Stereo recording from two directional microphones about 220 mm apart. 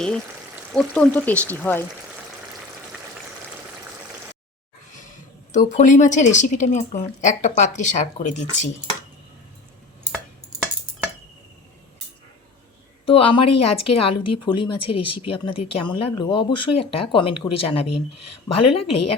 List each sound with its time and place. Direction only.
0.7 s speech: centre (ahead or behind)
5.5 s speech: 35° left (ahead or behind)
13.1 s speech: 25° left (ahead or behind)